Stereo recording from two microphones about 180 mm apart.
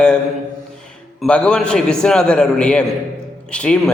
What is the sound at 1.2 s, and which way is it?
A man's voice, 5° left (ahead or behind).